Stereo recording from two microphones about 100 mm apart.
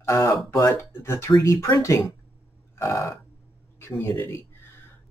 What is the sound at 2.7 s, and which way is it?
Burping, 30° left (ahead or behind).